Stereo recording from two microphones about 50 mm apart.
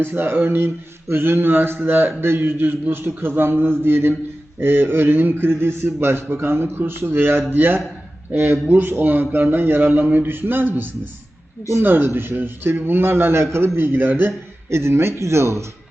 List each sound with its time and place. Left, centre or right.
0.0 s mantra: right
11.8 s speech: right
12.0 s mantra: right
13.7 s speech: right
14.7 s speech: right